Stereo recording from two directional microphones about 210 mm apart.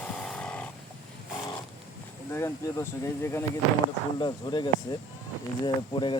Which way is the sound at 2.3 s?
15° left (ahead or behind).